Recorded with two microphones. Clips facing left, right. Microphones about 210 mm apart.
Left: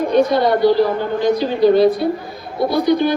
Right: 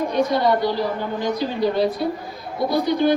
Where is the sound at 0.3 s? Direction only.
70° left (ahead or behind).